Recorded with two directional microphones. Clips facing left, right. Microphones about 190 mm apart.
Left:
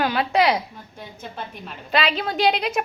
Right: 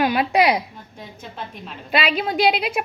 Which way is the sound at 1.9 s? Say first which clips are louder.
Right 1 dB; 10° right (ahead or behind).